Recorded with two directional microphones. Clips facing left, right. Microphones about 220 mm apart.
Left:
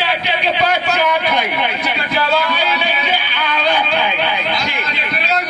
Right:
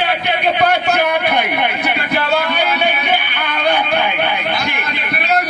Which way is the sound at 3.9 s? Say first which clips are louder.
Right 1 dB; 55° right (ahead or behind).